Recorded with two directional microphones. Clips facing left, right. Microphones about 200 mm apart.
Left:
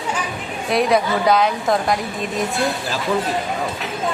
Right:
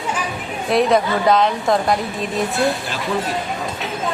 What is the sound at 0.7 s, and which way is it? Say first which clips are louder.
A woman's voice: right 1 dB; centre (ahead or behind).